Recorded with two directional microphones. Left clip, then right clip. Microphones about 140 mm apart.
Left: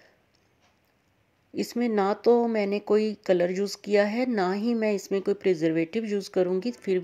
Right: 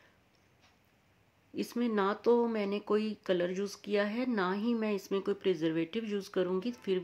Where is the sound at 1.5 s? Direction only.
40° left (ahead or behind).